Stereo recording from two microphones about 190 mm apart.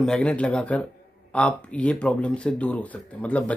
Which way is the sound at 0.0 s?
5° left (ahead or behind).